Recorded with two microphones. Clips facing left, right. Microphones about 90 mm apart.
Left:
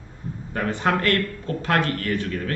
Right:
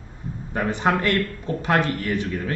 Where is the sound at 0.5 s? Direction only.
15° right (ahead or behind).